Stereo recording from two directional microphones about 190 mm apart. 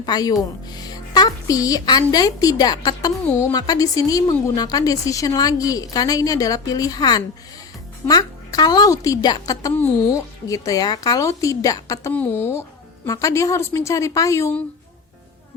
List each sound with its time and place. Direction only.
0.0 s a woman's voice: 20° left (ahead or behind)